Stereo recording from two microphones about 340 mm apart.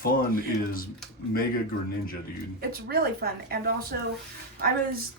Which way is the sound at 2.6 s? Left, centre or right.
Right.